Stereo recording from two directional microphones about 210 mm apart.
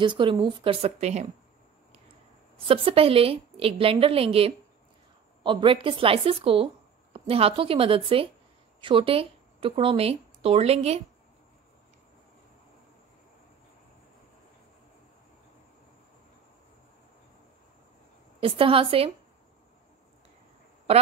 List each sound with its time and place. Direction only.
0.0 s speech: 25° right (ahead or behind)
2.6 s speech: 25° right (ahead or behind)
18.4 s speech: 25° right (ahead or behind)